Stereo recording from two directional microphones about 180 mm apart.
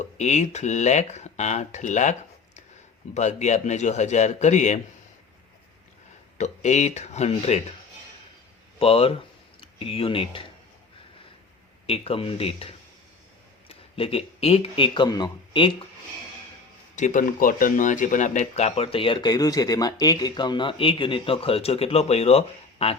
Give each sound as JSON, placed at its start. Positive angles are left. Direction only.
{"t": 0.0, "sound": "speech", "side_deg": 40}
{"t": 3.2, "sound": "speech", "side_deg": 40}
{"t": 6.3, "sound": "speech", "side_deg": 40}
{"t": 8.8, "sound": "speech", "side_deg": 30}
{"t": 11.9, "sound": "speech", "side_deg": 30}
{"t": 16.9, "sound": "speech", "side_deg": 45}